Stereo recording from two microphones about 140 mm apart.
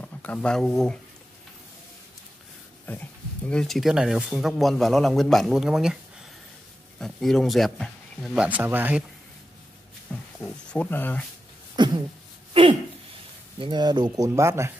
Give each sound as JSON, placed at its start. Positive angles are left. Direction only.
{"t": 0.0, "sound": "speech", "side_deg": 10}
{"t": 2.9, "sound": "speech", "side_deg": 10}
{"t": 7.0, "sound": "speech", "side_deg": 0}
{"t": 8.5, "sound": "speech", "side_deg": -10}
{"t": 10.1, "sound": "a sound", "side_deg": 5}
{"t": 10.4, "sound": "speech", "side_deg": 10}
{"t": 11.7, "sound": "a sound", "side_deg": -30}
{"t": 13.6, "sound": "speech", "side_deg": -30}